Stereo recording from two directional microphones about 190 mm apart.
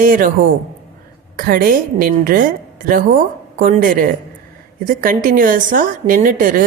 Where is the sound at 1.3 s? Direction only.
50° right (ahead or behind).